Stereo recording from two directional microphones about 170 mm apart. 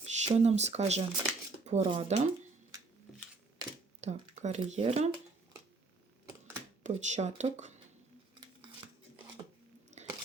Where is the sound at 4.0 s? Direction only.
40° right (ahead or behind).